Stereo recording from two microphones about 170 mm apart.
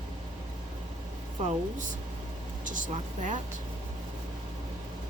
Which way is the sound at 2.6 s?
50° right (ahead or behind).